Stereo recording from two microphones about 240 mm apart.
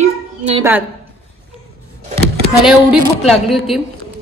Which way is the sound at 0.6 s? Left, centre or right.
Centre.